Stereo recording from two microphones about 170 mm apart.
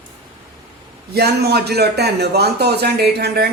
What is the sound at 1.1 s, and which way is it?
Speech, 70° right (ahead or behind).